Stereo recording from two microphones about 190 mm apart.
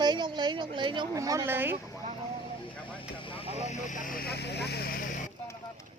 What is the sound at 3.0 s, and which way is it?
Speech, 25° left (ahead or behind).